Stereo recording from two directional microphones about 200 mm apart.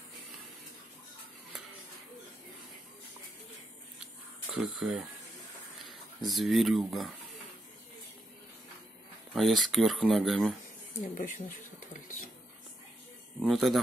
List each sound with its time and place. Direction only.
4.6 s speech: centre (ahead or behind)
9.3 s speech: centre (ahead or behind)
11.0 s speech: 35° left (ahead or behind)
13.4 s speech: centre (ahead or behind)